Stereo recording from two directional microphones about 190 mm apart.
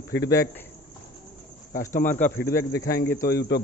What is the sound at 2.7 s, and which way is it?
Speech, 55° left (ahead or behind).